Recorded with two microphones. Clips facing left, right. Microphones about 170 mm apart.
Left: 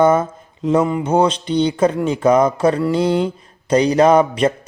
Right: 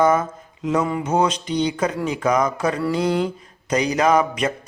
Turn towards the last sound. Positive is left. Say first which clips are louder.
# left 6 dB
turn(degrees=30)  # may be behind; listen again after turning